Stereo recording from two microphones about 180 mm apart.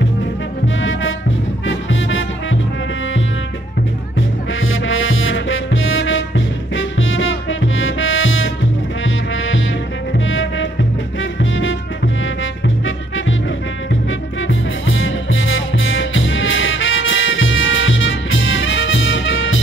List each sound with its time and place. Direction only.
0.7 s music: 90° left
4.6 s music: 90° left
12.6 s music: 90° left
14.5 s music: 90° left